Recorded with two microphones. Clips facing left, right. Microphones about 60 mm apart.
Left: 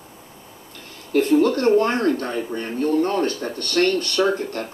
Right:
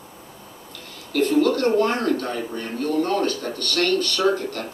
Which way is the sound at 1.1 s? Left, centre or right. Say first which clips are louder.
Left 2 dB; left.